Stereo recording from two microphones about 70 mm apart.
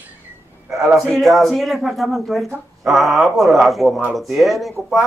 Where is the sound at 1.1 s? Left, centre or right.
Centre.